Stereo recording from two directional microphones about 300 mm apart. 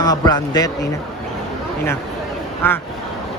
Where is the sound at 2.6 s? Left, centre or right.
Centre.